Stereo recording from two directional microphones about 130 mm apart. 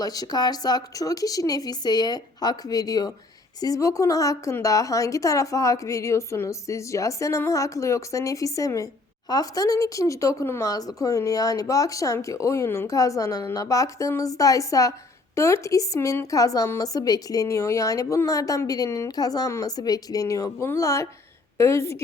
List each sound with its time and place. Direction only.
0.0 s a woman's voice: 30° left (ahead or behind)